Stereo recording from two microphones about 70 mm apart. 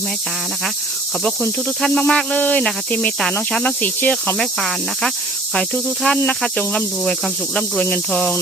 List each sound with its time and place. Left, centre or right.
1.8 s cricket: centre
4.4 s cricket: centre